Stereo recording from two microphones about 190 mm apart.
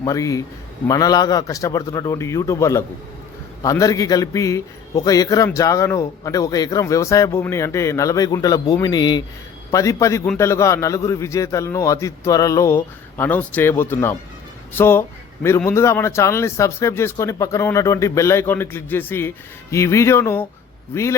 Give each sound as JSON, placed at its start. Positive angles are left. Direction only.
{"t": 0.0, "sound": "a man's voice", "side_deg": 15}